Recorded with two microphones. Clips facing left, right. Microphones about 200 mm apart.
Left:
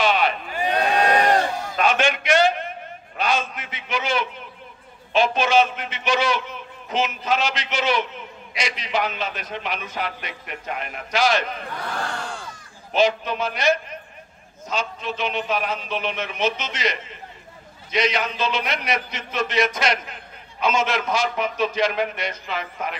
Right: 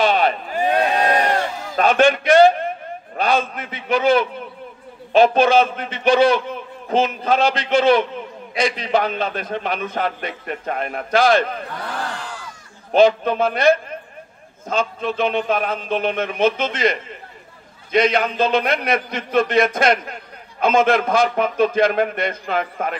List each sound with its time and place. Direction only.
0.0 s a sound: 50° right (ahead or behind)
1.8 s a man's voice: 45° right (ahead or behind)
12.9 s a man's voice: 55° right (ahead or behind)